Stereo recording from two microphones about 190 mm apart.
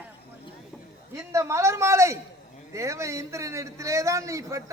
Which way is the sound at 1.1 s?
15° right (ahead or behind).